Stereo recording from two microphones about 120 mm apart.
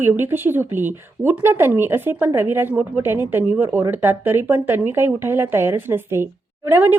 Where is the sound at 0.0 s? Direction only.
20° right (ahead or behind).